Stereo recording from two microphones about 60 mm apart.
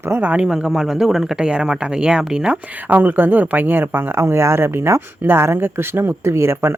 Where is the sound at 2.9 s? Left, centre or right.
Right.